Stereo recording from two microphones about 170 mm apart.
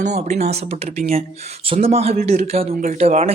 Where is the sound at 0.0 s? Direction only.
40° right (ahead or behind).